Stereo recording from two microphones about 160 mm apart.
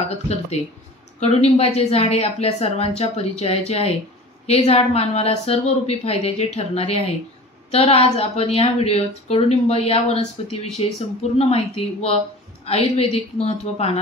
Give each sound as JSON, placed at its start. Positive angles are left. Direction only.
{"t": 1.2, "sound": "a woman's voice", "side_deg": 40}